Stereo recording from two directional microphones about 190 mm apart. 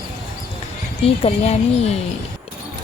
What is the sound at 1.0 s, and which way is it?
Speech, 30° left (ahead or behind).